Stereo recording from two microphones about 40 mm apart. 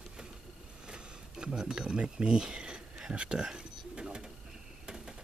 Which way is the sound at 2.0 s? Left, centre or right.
Right.